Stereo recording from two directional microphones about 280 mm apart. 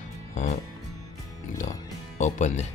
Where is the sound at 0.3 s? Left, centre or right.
Left.